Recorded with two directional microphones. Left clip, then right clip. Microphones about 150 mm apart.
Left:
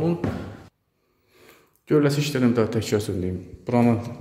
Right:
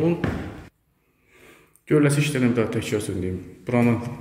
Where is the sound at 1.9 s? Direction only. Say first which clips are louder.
Even; 20° left (ahead or behind); by 3.3 s 35° left (ahead or behind).